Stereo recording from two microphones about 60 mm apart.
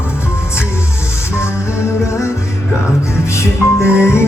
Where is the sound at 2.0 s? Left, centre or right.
Left.